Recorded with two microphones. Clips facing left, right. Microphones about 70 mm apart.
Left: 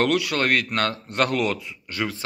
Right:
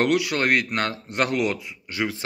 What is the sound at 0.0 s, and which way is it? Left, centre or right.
Speech, right.